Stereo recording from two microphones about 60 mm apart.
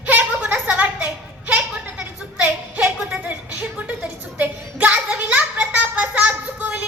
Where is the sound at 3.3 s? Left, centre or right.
Right.